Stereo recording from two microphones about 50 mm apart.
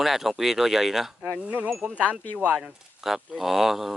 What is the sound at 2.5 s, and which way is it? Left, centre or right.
Speech, centre.